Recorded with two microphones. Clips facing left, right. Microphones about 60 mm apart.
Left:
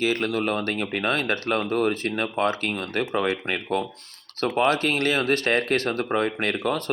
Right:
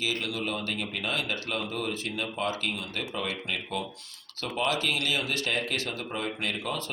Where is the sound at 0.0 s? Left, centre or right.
Left.